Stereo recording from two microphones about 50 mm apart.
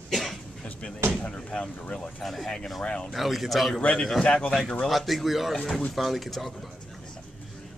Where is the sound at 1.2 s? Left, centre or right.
Centre.